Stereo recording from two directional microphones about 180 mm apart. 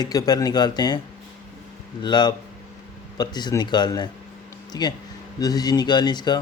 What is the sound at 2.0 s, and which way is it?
Speech, 25° left (ahead or behind).